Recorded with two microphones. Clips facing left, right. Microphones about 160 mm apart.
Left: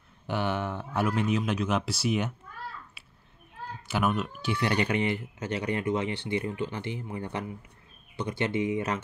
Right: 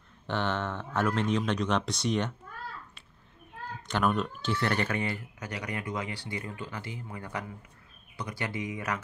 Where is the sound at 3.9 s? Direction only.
5° left (ahead or behind); by 9.0 s 25° left (ahead or behind).